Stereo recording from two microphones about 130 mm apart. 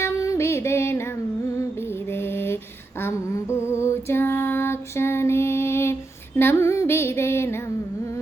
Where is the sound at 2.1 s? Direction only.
20° left (ahead or behind).